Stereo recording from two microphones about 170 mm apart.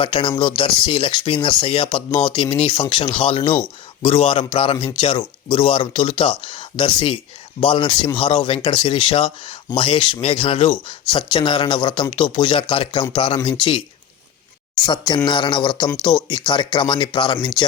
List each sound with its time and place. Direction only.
0.0 s speech: 30° left (ahead or behind)
14.8 s speech: 25° left (ahead or behind)